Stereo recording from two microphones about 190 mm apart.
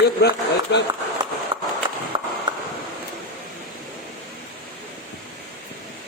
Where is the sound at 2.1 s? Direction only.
25° right (ahead or behind).